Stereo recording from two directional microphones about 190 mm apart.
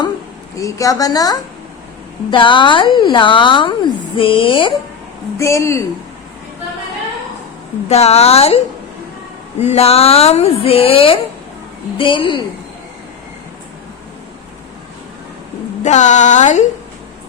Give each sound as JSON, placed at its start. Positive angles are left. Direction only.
{"t": 0.6, "sound": "a woman's voice", "side_deg": 20}
{"t": 5.4, "sound": "speech", "side_deg": 15}
{"t": 7.9, "sound": "a woman's voice", "side_deg": 35}
{"t": 15.8, "sound": "a woman's voice", "side_deg": 40}